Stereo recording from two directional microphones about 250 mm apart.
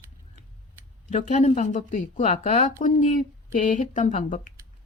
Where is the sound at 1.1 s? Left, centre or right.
Left.